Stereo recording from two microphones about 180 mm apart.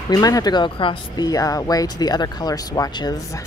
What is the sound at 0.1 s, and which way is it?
Speech, 20° left (ahead or behind).